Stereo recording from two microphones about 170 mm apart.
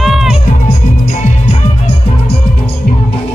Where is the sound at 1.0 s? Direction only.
40° left (ahead or behind).